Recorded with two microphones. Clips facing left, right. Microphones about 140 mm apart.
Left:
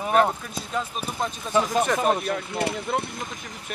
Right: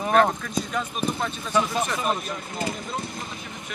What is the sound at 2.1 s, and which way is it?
Speech, 65° left (ahead or behind).